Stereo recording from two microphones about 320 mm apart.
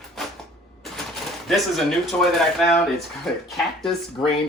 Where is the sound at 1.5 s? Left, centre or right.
Centre.